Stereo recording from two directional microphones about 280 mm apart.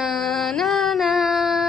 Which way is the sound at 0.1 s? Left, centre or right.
Centre.